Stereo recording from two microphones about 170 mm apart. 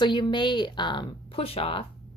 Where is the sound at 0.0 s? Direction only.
25° left (ahead or behind).